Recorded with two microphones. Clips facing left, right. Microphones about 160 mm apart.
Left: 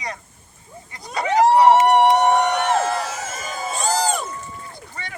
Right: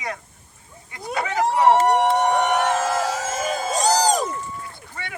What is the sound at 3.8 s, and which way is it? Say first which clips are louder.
Crowd: right 2 dB; 40° right (ahead or behind).